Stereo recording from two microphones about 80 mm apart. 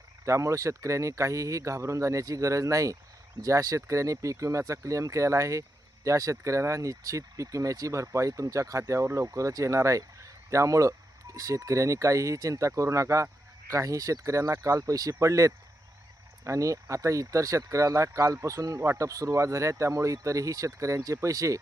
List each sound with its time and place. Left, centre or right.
0.3 s speech: right